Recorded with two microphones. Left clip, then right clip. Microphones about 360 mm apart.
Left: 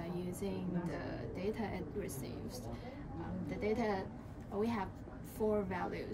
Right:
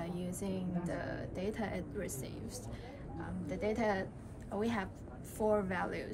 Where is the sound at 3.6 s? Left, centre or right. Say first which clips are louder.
Right 2 dB; right.